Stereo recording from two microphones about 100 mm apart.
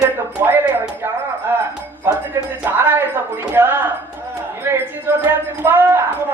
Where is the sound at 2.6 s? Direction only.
20° right (ahead or behind).